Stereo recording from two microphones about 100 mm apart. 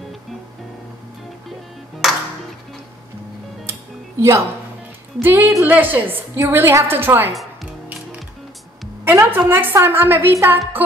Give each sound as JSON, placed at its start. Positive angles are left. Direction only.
{"t": 4.2, "sound": "a woman's voice", "side_deg": -30}
{"t": 9.0, "sound": "a woman's voice", "side_deg": -20}